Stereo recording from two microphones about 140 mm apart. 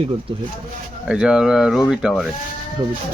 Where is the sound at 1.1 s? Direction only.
5° right (ahead or behind).